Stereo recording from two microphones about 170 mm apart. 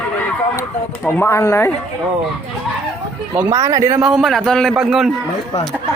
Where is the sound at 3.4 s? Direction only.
15° right (ahead or behind).